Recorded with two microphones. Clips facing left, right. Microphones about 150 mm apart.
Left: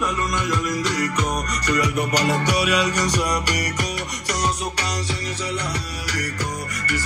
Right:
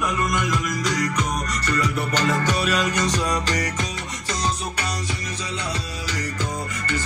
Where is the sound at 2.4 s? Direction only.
15° left (ahead or behind).